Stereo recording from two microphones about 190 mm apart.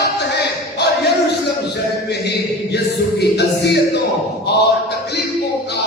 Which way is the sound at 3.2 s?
60° left (ahead or behind).